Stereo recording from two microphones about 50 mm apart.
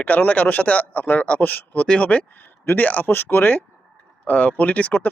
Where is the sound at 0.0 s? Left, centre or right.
Left.